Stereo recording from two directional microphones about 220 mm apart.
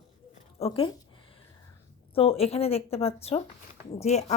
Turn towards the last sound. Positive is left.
turn(degrees=30)  # may be behind; listen again after turning